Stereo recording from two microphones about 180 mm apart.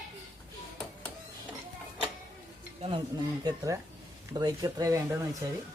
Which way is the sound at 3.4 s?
20° right (ahead or behind).